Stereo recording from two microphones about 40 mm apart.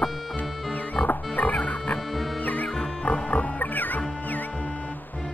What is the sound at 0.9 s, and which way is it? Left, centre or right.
Music, left.